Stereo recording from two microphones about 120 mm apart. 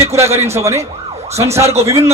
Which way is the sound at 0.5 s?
25° right (ahead or behind).